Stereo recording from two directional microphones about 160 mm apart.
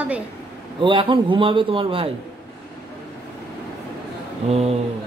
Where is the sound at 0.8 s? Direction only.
30° right (ahead or behind).